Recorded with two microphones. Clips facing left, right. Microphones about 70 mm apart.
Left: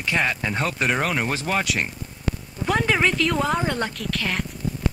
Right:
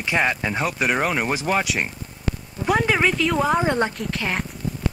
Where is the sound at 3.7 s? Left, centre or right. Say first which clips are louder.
Right 4 dB; right.